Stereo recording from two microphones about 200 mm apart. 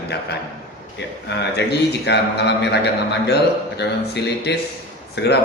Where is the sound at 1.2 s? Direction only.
55° left (ahead or behind).